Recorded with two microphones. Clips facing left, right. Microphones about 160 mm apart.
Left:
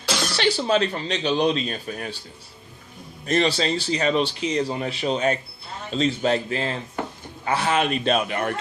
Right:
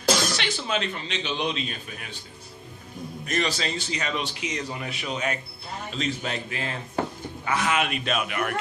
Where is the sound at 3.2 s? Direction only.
30° left (ahead or behind).